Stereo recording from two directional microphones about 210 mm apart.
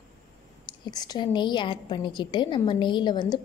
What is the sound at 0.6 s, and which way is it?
A woman's voice, 20° left (ahead or behind).